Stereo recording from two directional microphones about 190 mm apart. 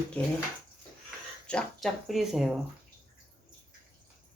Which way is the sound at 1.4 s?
5° left (ahead or behind).